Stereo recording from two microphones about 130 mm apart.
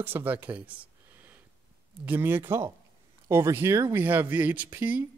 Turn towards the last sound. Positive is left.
turn(degrees=-10)  # may be behind; listen again after turning